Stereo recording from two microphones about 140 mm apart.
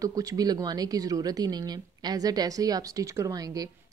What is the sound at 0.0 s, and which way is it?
A woman's voice, 25° right (ahead or behind).